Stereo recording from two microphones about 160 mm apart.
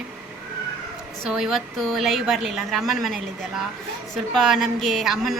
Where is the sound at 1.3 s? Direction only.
Centre (ahead or behind).